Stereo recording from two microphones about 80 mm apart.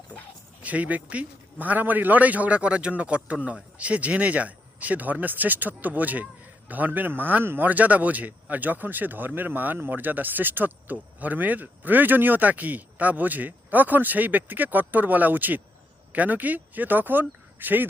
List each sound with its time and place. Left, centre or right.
0.6 s speech: centre